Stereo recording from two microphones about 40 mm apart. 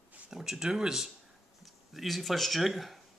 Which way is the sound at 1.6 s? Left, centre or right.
Centre.